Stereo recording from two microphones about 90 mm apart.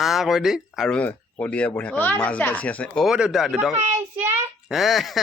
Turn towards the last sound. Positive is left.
turn(degrees=0)  # may be behind; listen again after turning